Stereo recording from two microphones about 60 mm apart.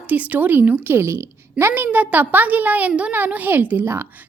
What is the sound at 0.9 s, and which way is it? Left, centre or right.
A woman's voice, right.